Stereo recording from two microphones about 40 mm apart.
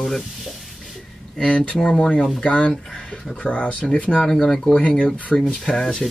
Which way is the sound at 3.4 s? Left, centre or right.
Left.